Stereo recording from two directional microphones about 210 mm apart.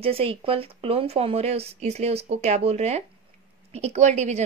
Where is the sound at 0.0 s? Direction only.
25° right (ahead or behind).